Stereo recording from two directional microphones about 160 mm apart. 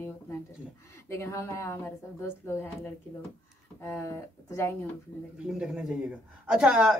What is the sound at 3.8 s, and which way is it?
Speech, 15° left (ahead or behind).